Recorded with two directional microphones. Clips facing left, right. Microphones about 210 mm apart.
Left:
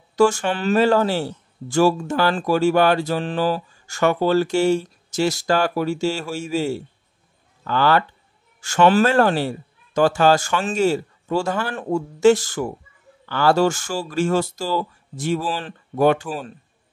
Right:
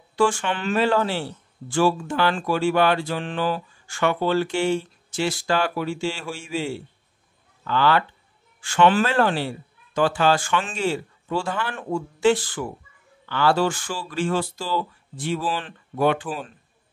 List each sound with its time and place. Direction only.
0.1 s a man's voice: 40° left (ahead or behind)